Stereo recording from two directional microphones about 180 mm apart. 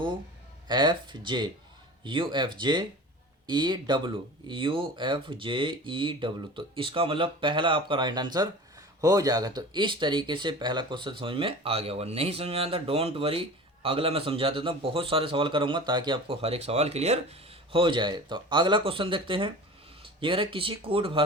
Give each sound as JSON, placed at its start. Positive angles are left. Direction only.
{"t": 0.7, "sound": "a man's voice", "side_deg": -25}